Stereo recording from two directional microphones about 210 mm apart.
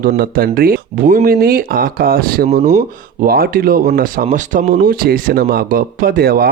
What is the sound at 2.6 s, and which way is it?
Speech, 35° right (ahead or behind).